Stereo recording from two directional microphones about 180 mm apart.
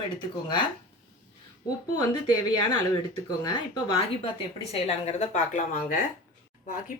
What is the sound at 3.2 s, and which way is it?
Speech, 25° left (ahead or behind).